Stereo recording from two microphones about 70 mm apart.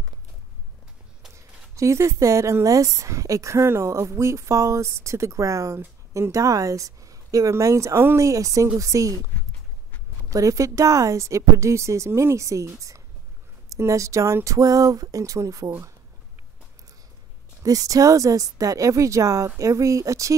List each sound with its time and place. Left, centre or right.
1.3 s a woman's voice: right
8.2 s speech: right
10.3 s speech: right
17.6 s speech: right